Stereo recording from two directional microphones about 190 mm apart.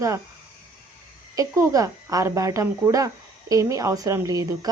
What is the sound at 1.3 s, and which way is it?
Speech, 15° right (ahead or behind).